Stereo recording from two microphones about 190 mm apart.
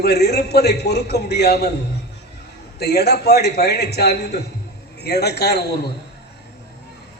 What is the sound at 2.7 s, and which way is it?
A man's voice, 60° left (ahead or behind).